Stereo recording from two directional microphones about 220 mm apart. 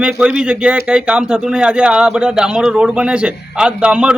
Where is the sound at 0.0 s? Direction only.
5° right (ahead or behind).